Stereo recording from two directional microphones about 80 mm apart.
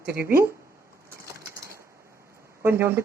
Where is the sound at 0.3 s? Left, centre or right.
Right.